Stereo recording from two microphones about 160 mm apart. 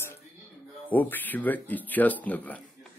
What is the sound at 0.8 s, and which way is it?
Speech, 10° left (ahead or behind).